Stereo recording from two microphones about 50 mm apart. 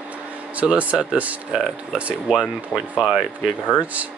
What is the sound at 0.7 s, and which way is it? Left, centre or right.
Speech, right.